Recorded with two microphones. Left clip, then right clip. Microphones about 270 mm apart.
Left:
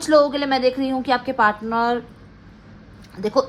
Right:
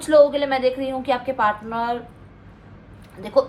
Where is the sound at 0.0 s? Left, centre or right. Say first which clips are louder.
Right 1 dB; left.